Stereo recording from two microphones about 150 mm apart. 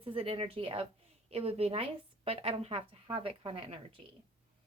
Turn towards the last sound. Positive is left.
turn(degrees=-35)  # may be behind; listen again after turning